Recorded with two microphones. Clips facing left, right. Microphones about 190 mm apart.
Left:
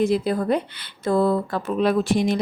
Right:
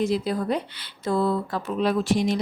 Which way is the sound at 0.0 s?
55° left (ahead or behind).